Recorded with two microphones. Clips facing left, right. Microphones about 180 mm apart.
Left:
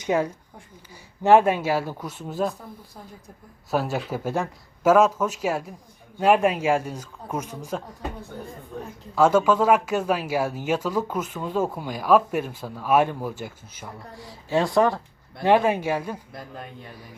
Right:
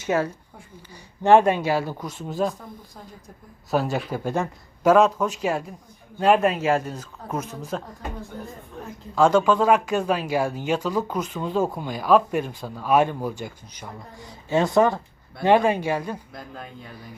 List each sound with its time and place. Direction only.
0.0 s speech: 15° left (ahead or behind)
9.1 s speech: 5° left (ahead or behind)